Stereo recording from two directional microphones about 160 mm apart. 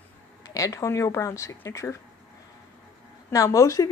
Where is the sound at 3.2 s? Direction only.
15° left (ahead or behind).